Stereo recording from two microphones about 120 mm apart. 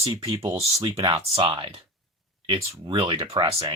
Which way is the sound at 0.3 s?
50° right (ahead or behind).